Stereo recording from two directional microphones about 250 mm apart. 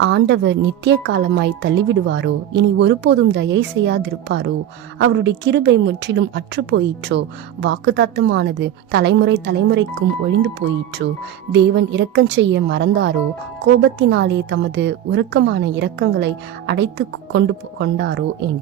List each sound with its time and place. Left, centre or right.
0.0 s a woman's voice: right
11.5 s a woman's voice: right